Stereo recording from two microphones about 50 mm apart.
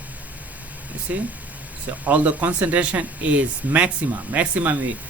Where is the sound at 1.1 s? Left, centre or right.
Right.